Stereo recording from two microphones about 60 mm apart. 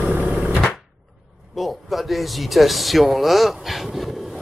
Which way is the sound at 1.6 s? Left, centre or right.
Centre.